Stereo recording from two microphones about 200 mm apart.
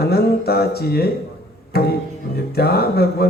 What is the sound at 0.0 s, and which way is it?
Speech, 50° left (ahead or behind).